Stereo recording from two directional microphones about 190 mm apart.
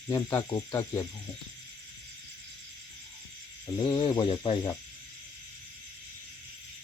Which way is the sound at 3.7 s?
20° left (ahead or behind).